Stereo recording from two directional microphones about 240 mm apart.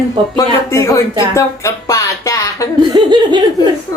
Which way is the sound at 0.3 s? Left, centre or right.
Centre.